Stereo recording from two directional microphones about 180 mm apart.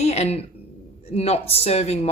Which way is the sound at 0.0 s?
35° left (ahead or behind).